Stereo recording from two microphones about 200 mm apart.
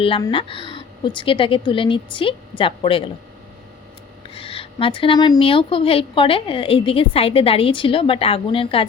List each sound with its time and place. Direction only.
0.0 s a woman's voice: 25° left (ahead or behind)
4.4 s a woman's voice: 30° left (ahead or behind)